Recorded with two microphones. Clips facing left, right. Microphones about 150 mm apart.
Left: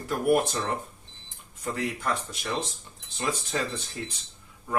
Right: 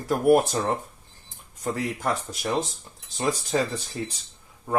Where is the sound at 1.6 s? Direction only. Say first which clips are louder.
Right 3 dB; 40° right (ahead or behind).